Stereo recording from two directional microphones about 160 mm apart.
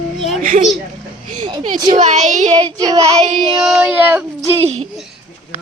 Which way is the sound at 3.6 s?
5° right (ahead or behind).